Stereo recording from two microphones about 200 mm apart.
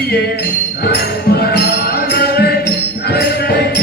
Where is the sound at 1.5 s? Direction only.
55° left (ahead or behind).